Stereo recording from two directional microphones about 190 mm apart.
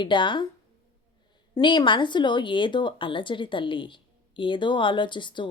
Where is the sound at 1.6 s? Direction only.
25° left (ahead or behind).